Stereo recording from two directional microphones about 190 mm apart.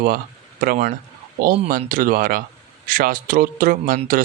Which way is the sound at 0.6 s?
45° right (ahead or behind).